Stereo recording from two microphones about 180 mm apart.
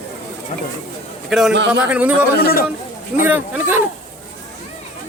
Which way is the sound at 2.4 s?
55° left (ahead or behind).